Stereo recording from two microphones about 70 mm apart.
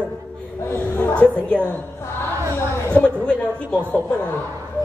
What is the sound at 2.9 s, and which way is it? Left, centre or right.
A man's voice, centre.